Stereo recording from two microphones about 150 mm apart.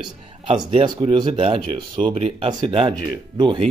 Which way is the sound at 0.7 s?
35° right (ahead or behind).